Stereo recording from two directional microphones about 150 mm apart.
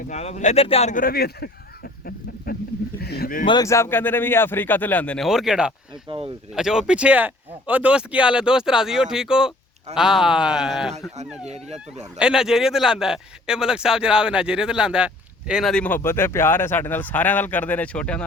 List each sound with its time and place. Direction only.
0.1 s speech: 45° left (ahead or behind); by 3.4 s 80° left
3.4 s speech: 30° left (ahead or behind)
3.7 s speech: 15° left (ahead or behind); by 5.7 s 5° right (ahead or behind)
6.1 s speech: 40° right (ahead or behind)
6.5 s a man's voice: 5° right (ahead or behind)
11.4 s speech: 45° right (ahead or behind)
12.2 s a man's voice: 5° right (ahead or behind)
15.7 s speech: 10° left (ahead or behind)